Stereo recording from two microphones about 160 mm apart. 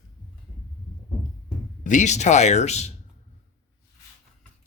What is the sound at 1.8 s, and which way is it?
Speech, 50° left (ahead or behind).